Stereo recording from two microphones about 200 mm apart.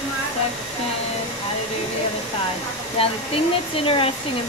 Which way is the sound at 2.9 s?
25° left (ahead or behind).